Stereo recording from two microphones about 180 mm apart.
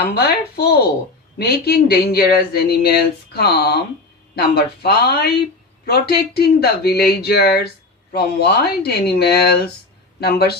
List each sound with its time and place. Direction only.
0.0 s speech: 60° left (ahead or behind)